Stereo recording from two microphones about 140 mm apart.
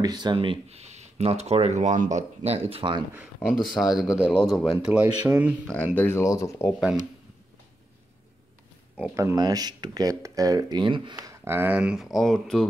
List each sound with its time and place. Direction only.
0.0 s speech: 30° right (ahead or behind)
3.4 s speech: centre (ahead or behind)
4.7 s speech: 10° right (ahead or behind)
5.9 s speech: 15° left (ahead or behind)
9.1 s speech: 25° right (ahead or behind); by 12.6 s 5° left (ahead or behind)